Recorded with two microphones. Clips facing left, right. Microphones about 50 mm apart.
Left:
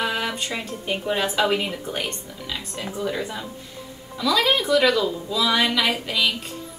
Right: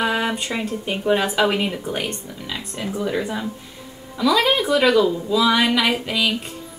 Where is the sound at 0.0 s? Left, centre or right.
Centre.